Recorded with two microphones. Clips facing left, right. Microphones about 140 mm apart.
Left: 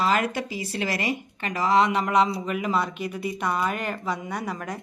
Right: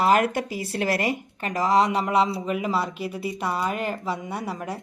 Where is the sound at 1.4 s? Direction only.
40° right (ahead or behind).